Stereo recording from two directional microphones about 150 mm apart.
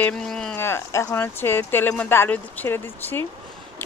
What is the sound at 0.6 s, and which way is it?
Speech, 15° left (ahead or behind).